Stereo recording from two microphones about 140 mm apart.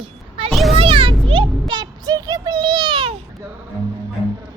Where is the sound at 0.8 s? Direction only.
40° right (ahead or behind).